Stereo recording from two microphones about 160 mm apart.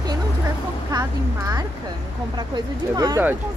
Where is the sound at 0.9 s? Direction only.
25° right (ahead or behind).